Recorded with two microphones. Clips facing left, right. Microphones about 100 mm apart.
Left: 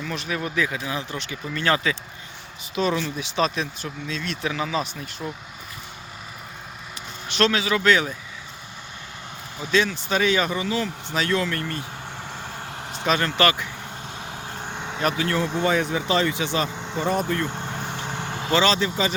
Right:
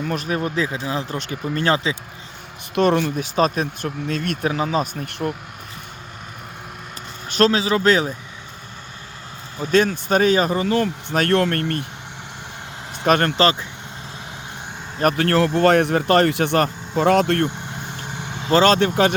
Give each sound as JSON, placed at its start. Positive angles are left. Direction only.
{"t": 0.0, "sound": "speech", "side_deg": -45}
{"t": 1.2, "sound": "speech", "side_deg": -45}
{"t": 2.7, "sound": "speech", "side_deg": -55}
{"t": 7.3, "sound": "speech", "side_deg": -40}
{"t": 9.6, "sound": "speech", "side_deg": -45}
{"t": 13.1, "sound": "speech", "side_deg": -55}
{"t": 13.3, "sound": "speech", "side_deg": -30}
{"t": 14.7, "sound": "vehicle", "side_deg": 60}
{"t": 15.0, "sound": "speech", "side_deg": -65}
{"t": 17.5, "sound": "vehicle", "side_deg": 50}
{"t": 18.5, "sound": "speech", "side_deg": -50}